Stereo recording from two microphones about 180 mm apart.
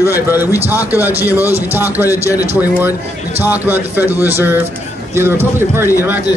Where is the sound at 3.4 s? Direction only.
10° right (ahead or behind).